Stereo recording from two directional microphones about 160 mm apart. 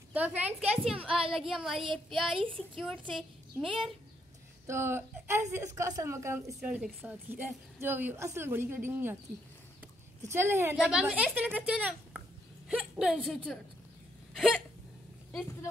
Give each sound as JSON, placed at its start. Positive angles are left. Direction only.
{"t": 0.1, "sound": "a woman's voice", "side_deg": -10}
{"t": 4.6, "sound": "a woman's voice", "side_deg": -15}
{"t": 10.3, "sound": "a woman's voice", "side_deg": -15}